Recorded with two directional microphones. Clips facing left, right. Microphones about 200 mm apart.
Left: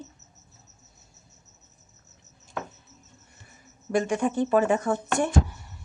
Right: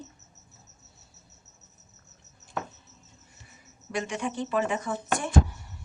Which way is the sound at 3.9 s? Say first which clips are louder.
Left 7 dB; 45° left (ahead or behind).